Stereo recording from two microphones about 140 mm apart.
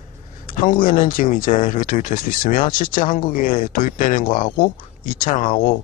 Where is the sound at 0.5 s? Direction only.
80° left.